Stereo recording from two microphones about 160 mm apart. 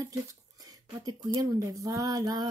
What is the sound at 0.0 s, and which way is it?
Speech, 20° right (ahead or behind).